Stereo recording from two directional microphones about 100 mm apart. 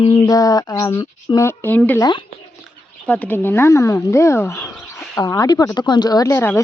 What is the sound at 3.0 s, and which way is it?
A woman's voice, 15° left (ahead or behind).